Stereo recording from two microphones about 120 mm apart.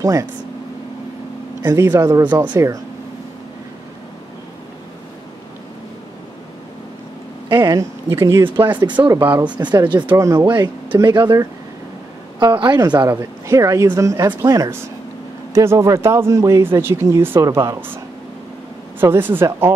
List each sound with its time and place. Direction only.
0.0 s speech: 25° right (ahead or behind)
1.6 s speech: 25° right (ahead or behind)
7.4 s a sound: 35° right (ahead or behind)
8.1 s speech: 20° right (ahead or behind)
8.7 s speech: 40° right (ahead or behind)
9.1 s speech: 15° right (ahead or behind)
9.6 s speech: 40° right (ahead or behind)
10.0 s speech: 25° right (ahead or behind)
10.4 s speech: 40° right (ahead or behind)
12.4 s speech: 35° right (ahead or behind); by 17.9 s 20° right (ahead or behind)
18.9 s speech: 20° right (ahead or behind)